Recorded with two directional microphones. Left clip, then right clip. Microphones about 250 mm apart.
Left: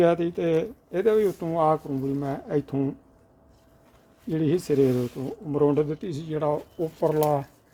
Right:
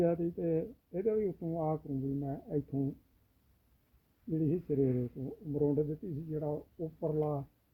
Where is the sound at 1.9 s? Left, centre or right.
Left.